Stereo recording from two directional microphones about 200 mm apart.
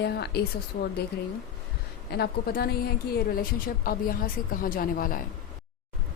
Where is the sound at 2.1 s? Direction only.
50° left (ahead or behind).